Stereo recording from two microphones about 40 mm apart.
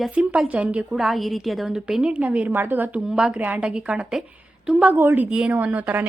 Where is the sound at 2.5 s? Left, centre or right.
Right.